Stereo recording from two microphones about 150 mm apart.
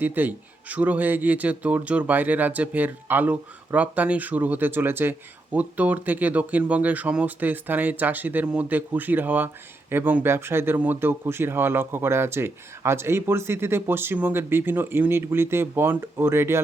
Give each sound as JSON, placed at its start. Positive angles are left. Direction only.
{"t": 0.0, "sound": "speech", "side_deg": -10}